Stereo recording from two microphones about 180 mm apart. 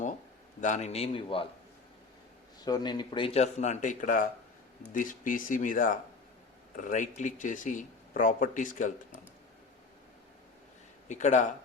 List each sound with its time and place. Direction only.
0.6 s speech: 40° left (ahead or behind)
2.6 s speech: 20° left (ahead or behind); by 8.9 s 45° left (ahead or behind)
11.1 s speech: 40° left (ahead or behind)